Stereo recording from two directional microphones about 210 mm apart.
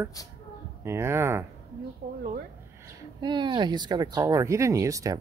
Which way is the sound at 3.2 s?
20° right (ahead or behind).